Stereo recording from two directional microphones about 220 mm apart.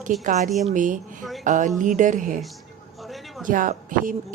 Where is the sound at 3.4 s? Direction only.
40° right (ahead or behind).